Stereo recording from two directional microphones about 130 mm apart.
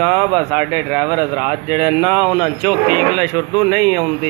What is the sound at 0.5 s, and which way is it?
Speech, 5° left (ahead or behind).